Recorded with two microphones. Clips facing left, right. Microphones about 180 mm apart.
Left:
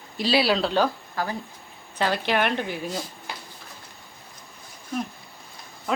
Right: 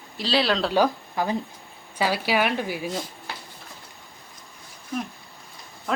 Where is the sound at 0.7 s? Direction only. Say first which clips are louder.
Right 2 dB; 15° right (ahead or behind).